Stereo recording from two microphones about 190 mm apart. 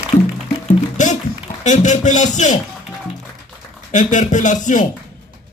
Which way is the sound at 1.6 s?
40° left (ahead or behind).